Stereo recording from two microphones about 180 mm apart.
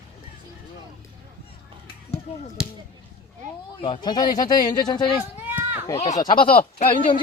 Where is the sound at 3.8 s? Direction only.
25° left (ahead or behind).